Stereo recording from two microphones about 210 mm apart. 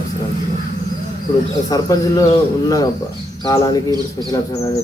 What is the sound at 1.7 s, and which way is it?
A man's voice, 15° left (ahead or behind).